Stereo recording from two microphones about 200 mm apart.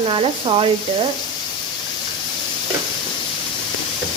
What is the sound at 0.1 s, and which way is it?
Speech, 25° right (ahead or behind).